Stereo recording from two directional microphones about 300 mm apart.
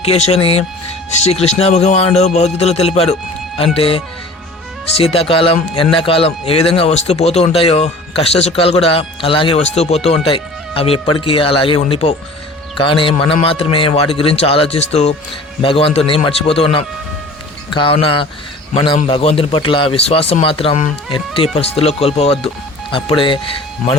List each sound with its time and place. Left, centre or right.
0.0 s speech: centre